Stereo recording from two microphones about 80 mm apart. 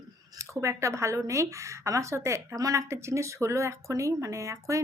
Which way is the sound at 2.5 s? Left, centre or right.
Right.